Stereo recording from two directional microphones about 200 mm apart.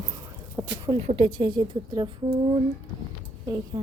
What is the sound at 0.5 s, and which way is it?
Speech, 20° right (ahead or behind).